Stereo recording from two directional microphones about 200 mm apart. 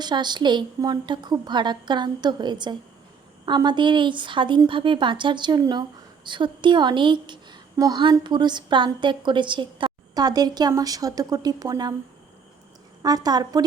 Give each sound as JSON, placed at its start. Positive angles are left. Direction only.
{"t": 0.0, "sound": "a woman's voice", "side_deg": -20}
{"t": 13.0, "sound": "a woman's voice", "side_deg": -20}